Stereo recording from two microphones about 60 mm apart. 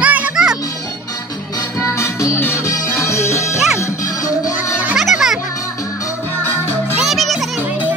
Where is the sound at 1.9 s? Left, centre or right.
Left.